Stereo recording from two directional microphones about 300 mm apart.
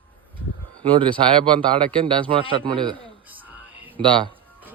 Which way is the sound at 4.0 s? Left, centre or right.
Centre.